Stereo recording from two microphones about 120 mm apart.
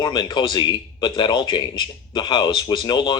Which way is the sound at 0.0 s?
40° left (ahead or behind).